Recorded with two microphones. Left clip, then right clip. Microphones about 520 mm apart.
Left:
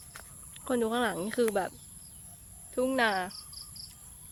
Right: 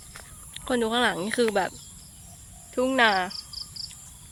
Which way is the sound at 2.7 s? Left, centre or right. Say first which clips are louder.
Right 6 dB; left.